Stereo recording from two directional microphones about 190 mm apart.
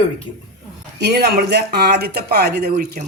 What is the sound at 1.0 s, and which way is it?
Speech, 60° right (ahead or behind).